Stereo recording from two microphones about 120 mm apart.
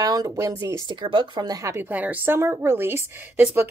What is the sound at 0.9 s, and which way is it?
A woman's voice, 40° right (ahead or behind).